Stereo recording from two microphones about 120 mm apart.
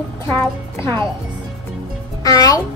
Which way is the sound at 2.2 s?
30° left (ahead or behind).